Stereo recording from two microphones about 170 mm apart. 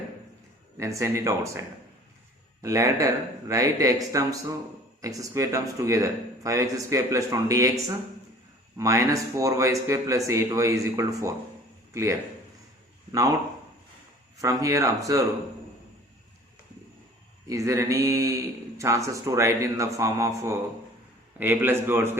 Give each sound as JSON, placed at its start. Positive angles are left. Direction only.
{"t": 0.8, "sound": "speech", "side_deg": -15}
{"t": 13.1, "sound": "speech", "side_deg": -20}
{"t": 14.4, "sound": "speech", "side_deg": -20}
{"t": 17.5, "sound": "speech", "side_deg": -15}